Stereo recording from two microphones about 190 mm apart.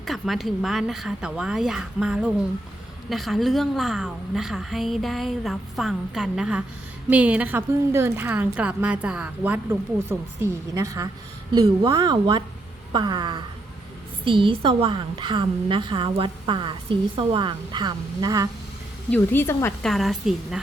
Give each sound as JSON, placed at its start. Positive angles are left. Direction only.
{"t": 0.0, "sound": "a woman's voice", "side_deg": 0}
{"t": 19.1, "sound": "speech", "side_deg": 10}
{"t": 19.8, "sound": "a woman's voice", "side_deg": 0}